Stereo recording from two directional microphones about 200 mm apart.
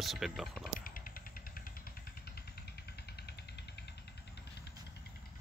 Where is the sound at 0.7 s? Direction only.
45° left (ahead or behind).